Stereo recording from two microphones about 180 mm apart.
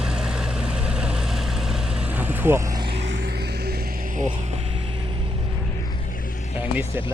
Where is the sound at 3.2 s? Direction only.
60° right (ahead or behind).